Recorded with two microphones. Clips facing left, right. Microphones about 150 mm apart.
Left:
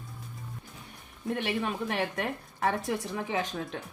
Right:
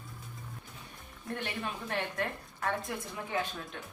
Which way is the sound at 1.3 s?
75° left (ahead or behind).